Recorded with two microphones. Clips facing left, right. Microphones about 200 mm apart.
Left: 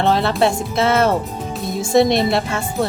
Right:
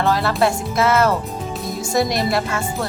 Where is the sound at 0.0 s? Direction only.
25° left (ahead or behind).